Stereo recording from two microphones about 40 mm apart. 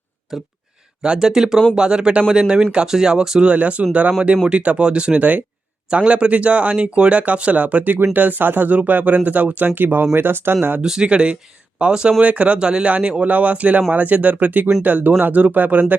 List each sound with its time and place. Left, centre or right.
0.3 s speech: centre
1.0 s speech: right
3.4 s speech: right
8.1 s speech: right
10.8 s speech: centre
11.1 s speech: right
12.2 s speech: right
12.5 s speech: right